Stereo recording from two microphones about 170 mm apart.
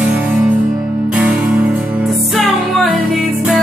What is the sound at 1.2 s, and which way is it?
Music, 5° right (ahead or behind).